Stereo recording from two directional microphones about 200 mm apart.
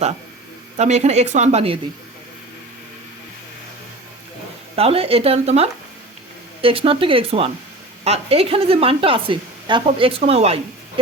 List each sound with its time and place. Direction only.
0.8 s speech: 35° right (ahead or behind)
4.7 s speech: 30° right (ahead or behind)